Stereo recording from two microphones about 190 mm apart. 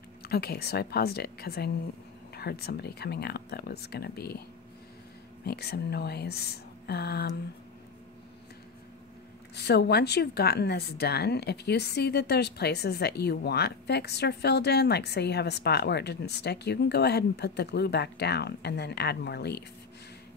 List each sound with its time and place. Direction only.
0.3 s speech: 55° left (ahead or behind)
5.4 s speech: 55° left (ahead or behind)
9.6 s speech: 60° left (ahead or behind)